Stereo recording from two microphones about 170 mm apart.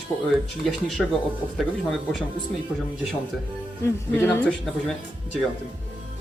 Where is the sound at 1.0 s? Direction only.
Centre (ahead or behind).